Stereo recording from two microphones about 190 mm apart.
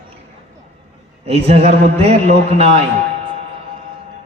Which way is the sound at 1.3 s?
35° right (ahead or behind).